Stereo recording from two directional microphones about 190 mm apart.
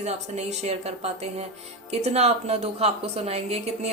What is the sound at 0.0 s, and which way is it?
A woman's voice, 35° right (ahead or behind).